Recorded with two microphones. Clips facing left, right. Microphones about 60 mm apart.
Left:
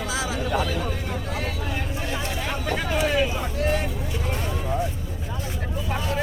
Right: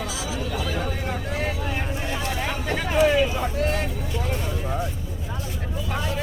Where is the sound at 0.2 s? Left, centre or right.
Left.